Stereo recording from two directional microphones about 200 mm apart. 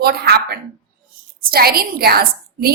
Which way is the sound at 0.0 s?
50° right (ahead or behind).